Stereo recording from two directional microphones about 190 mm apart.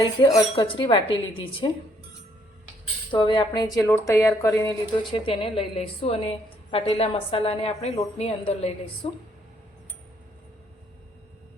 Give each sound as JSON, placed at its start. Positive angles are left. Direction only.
{"t": 0.0, "sound": "a woman's voice", "side_deg": 20}
{"t": 3.1, "sound": "speech", "side_deg": 25}
{"t": 5.1, "sound": "a woman's voice", "side_deg": 30}